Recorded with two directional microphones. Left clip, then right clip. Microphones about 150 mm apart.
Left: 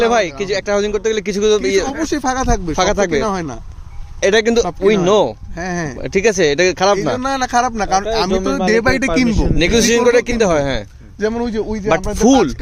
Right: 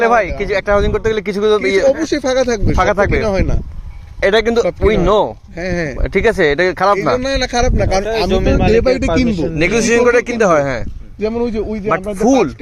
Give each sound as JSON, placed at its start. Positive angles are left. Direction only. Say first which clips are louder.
{"t": 0.1, "sound": "speech", "louder": "right 2 dB", "side_deg": 25}
{"t": 1.8, "sound": "speech", "louder": "right 5 dB", "side_deg": 50}
{"t": 2.7, "sound": "speech", "louder": "right 2 dB", "side_deg": 25}
{"t": 3.1, "sound": "speech", "louder": "right 2 dB", "side_deg": 45}
{"t": 4.2, "sound": "speech", "louder": "right 1 dB", "side_deg": 20}
{"t": 5.5, "sound": "speech", "louder": "right 5 dB", "side_deg": 40}
{"t": 6.0, "sound": "speech", "louder": "even", "side_deg": 20}
{"t": 7.2, "sound": "speech", "louder": "even", "side_deg": 40}
{"t": 9.6, "sound": "speech", "louder": "right 1 dB", "side_deg": 25}
{"t": 11.2, "sound": "speech", "louder": "right 1 dB", "side_deg": 55}